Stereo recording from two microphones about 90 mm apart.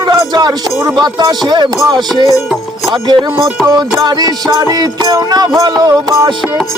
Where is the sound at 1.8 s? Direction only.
50° right (ahead or behind).